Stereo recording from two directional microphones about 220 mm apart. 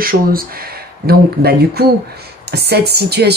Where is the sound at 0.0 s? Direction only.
40° right (ahead or behind).